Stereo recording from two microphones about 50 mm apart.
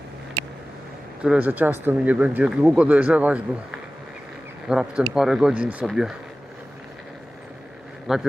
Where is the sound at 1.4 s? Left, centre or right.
Right.